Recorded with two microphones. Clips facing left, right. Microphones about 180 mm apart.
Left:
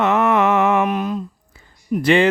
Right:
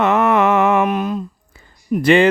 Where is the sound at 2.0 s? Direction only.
55° right (ahead or behind).